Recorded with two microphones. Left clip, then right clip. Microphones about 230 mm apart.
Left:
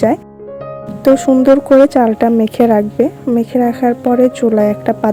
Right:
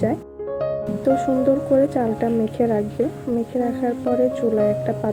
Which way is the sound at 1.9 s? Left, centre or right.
Left.